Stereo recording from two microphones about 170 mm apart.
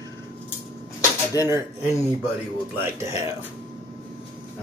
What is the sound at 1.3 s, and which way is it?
Speech, 15° right (ahead or behind).